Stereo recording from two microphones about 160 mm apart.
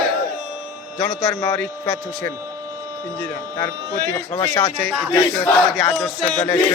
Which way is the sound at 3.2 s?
10° left (ahead or behind).